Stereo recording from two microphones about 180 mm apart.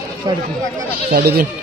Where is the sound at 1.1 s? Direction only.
60° right (ahead or behind).